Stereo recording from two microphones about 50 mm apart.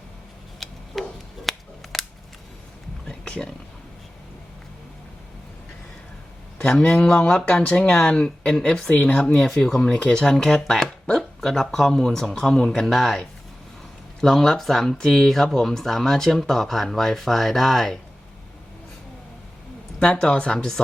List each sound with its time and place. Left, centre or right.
0.6 s a sound: centre
1.5 s scissors: centre
3.1 s a sound: centre
6.6 s speech: centre
9.0 s speech: left
9.2 s speech: centre
20.0 s speech: centre